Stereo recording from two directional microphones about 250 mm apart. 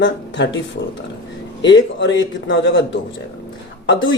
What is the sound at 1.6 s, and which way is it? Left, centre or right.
A man's voice, left.